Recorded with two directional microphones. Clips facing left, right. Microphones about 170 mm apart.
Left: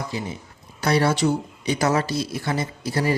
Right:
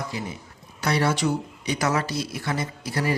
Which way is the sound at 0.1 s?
25° left (ahead or behind).